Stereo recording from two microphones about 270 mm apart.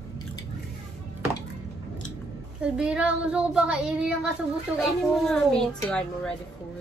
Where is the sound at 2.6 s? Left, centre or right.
Centre.